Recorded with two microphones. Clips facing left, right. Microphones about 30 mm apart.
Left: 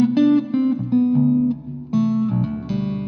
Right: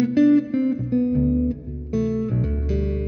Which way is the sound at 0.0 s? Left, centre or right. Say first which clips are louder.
Left 1 dB; left.